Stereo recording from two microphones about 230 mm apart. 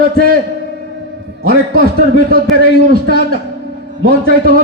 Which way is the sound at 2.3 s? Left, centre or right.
Right.